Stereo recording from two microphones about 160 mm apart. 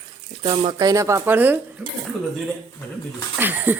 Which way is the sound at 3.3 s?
10° right (ahead or behind).